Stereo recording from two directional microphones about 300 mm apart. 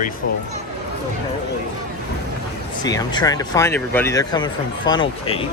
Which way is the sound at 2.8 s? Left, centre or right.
Centre.